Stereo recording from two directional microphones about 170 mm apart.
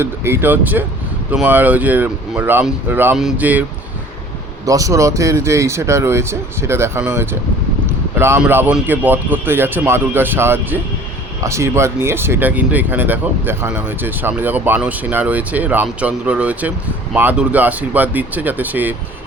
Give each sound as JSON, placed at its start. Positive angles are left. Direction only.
{"t": 0.0, "sound": "speech", "side_deg": -10}
{"t": 4.6, "sound": "speech", "side_deg": -20}